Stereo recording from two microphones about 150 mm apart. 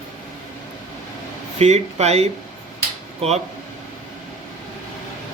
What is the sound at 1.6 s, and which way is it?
Speech, 45° right (ahead or behind).